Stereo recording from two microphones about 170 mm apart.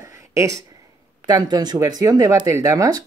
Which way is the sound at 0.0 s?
20° right (ahead or behind).